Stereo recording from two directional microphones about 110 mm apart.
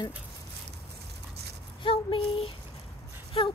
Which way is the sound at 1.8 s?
50° left (ahead or behind).